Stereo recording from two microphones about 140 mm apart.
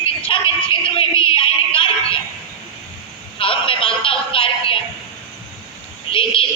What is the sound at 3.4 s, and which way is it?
Synthetic singing, 40° left (ahead or behind).